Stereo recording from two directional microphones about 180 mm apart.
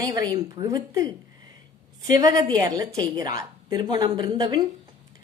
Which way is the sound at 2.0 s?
20° right (ahead or behind).